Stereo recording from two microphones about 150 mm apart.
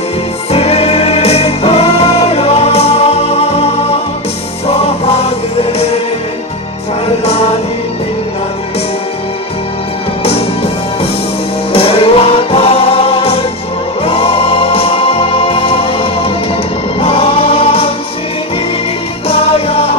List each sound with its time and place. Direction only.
0.5 s music: 45° left (ahead or behind)
7.1 s music: 40° left (ahead or behind)
10.2 s music: 40° left (ahead or behind)
17.0 s choir: 40° left (ahead or behind)
19.2 s music: 40° left (ahead or behind)